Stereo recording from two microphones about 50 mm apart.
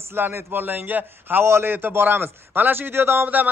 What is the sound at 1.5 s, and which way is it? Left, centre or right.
Speech, right.